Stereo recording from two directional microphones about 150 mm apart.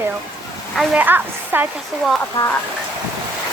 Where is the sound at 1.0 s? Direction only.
15° right (ahead or behind).